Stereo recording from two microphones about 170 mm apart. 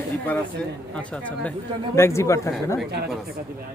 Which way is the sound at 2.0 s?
15° left (ahead or behind).